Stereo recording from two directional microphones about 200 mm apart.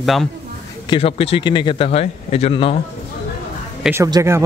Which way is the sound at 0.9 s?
30° left (ahead or behind).